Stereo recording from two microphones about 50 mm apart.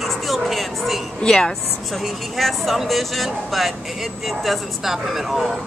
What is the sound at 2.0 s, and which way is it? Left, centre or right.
Speech, centre.